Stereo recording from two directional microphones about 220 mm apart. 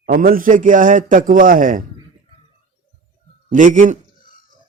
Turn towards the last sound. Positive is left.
turn(degrees=-35)  # may be behind; listen again after turning